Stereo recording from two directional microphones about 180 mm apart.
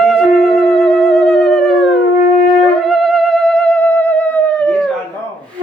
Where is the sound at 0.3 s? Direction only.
Centre (ahead or behind).